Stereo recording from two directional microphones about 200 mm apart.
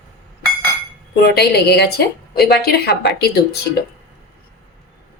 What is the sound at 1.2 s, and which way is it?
A woman's voice, 55° left (ahead or behind).